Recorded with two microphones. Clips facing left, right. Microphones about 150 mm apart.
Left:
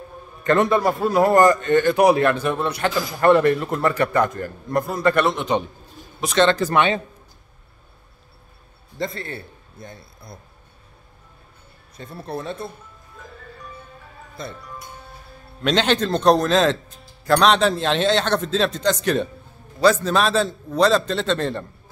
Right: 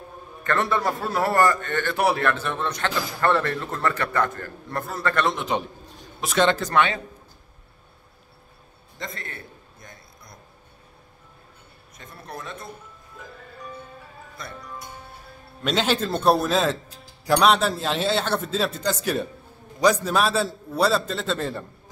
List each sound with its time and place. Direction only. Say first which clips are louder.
0.4 s a man's voice: left 6 dB; 20° left (ahead or behind)
5.2 s a man's voice: left 4 dB; centre (ahead or behind)
6.6 s a man's voice: left 3 dB; 20° left (ahead or behind)
8.9 s a man's voice: left 8 dB; 30° left (ahead or behind)
12.0 s speech: left 7 dB; 30° left (ahead or behind)
14.4 s a man's voice: left 6 dB; 25° left (ahead or behind)
15.6 s a man's voice: left 4 dB; 5° right (ahead or behind)